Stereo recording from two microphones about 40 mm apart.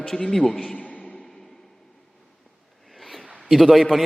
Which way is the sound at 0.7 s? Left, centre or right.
Left.